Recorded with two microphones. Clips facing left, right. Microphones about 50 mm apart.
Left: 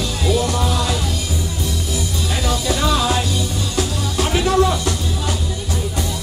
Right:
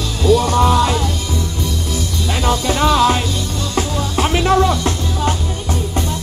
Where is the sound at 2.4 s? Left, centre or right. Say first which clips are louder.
Right 5 dB; right.